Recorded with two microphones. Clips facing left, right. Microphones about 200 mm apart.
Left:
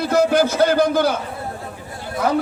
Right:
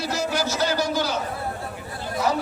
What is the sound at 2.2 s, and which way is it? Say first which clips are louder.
Speech: left 4 dB; 55° left (ahead or behind).